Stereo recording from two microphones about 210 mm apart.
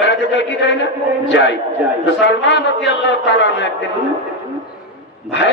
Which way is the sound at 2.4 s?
60° left (ahead or behind).